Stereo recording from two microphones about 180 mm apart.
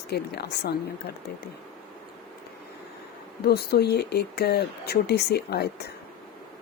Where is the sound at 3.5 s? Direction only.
60° left (ahead or behind).